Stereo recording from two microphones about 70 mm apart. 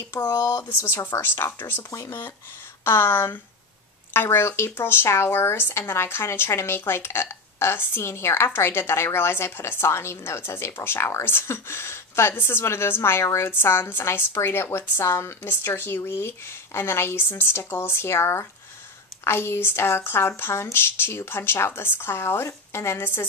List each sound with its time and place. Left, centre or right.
0.1 s speech: left
0.8 s speech: left